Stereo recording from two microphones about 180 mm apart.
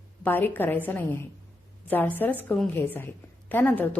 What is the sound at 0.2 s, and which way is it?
Speech, 10° left (ahead or behind).